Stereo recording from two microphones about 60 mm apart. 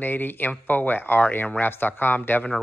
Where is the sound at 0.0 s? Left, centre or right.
Left.